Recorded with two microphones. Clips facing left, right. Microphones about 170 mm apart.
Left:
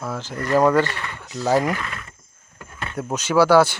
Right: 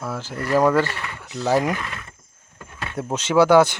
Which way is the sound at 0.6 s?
15° left (ahead or behind).